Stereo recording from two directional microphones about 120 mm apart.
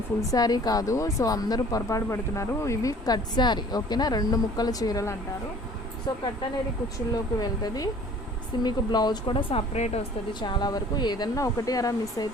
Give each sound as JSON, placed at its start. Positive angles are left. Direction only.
{"t": 0.2, "sound": "speech", "side_deg": 30}
{"t": 10.4, "sound": "speech", "side_deg": 40}